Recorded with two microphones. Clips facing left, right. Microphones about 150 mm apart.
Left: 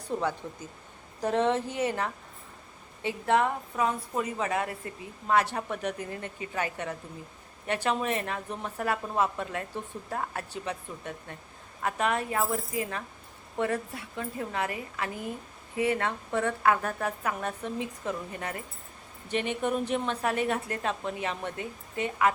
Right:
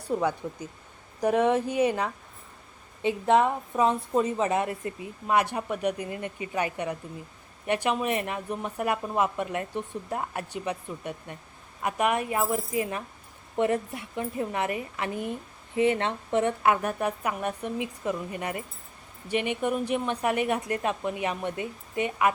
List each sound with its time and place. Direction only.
0.0 s a woman's voice: 10° right (ahead or behind)